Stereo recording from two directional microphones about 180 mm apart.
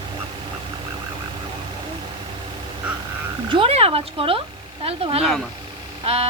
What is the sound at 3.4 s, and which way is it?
Speech, 30° right (ahead or behind).